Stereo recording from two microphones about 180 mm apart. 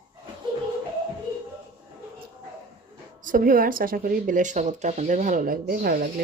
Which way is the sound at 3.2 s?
50° right (ahead or behind).